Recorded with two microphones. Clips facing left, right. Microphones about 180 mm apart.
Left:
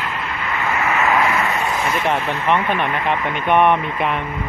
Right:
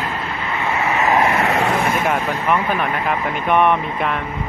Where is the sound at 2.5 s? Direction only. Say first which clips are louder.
Left 1 dB; 5° right (ahead or behind).